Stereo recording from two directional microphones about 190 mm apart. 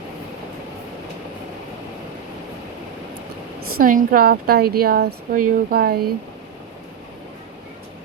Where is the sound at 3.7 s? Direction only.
45° right (ahead or behind).